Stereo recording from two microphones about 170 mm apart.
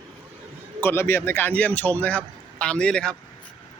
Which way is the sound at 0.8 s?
15° left (ahead or behind).